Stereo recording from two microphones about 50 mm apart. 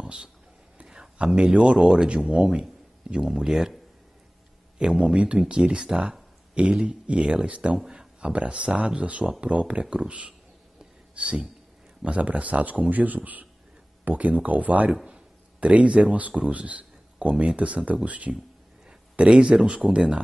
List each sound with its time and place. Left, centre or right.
0.0 s a sound: centre
1.1 s a man's voice: centre
4.7 s a man's voice: centre
7.8 s a man's voice: centre